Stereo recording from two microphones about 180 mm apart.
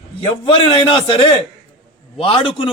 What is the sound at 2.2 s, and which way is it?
Speech, 30° left (ahead or behind).